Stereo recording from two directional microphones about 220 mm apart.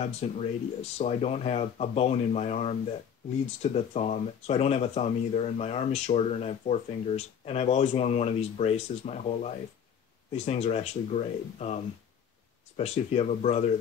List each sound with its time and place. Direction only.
0.0 s speech: 30° left (ahead or behind)